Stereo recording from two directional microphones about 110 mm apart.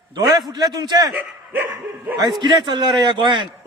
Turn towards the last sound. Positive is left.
turn(degrees=-45)  # may be behind; listen again after turning